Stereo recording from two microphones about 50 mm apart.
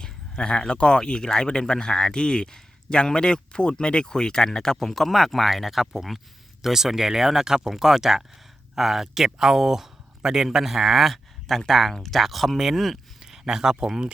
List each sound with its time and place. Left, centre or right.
0.0 s speech: centre